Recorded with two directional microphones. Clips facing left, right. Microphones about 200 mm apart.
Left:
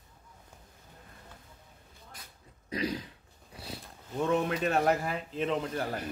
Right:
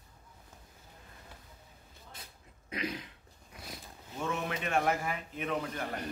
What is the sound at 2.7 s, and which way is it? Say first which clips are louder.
Throat clearing: left 5 dB; 35° left (ahead or behind).